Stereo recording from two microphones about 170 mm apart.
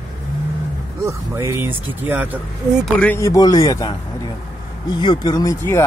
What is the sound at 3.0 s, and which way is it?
Speech, 10° left (ahead or behind).